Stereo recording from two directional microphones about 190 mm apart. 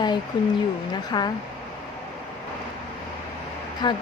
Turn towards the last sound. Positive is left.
turn(degrees=25)  # may be behind; listen again after turning